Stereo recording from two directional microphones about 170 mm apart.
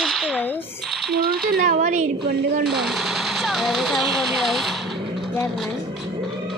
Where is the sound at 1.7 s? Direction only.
45° right (ahead or behind).